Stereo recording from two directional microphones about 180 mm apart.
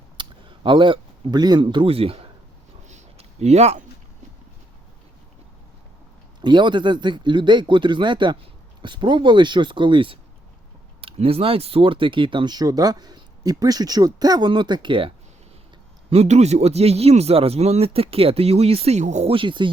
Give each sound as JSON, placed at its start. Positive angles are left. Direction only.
{"t": 0.2, "sound": "speech", "side_deg": -25}
{"t": 2.8, "sound": "a sound", "side_deg": -40}
{"t": 6.4, "sound": "a man's voice", "side_deg": -25}